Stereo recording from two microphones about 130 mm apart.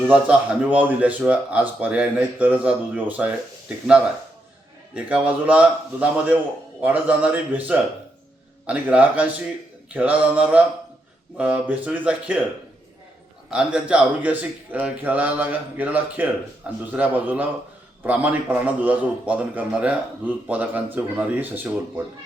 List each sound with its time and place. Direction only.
0.1 s a man's voice: 10° right (ahead or behind)
4.9 s a man's voice: 10° right (ahead or behind)
13.5 s a man's voice: 5° right (ahead or behind)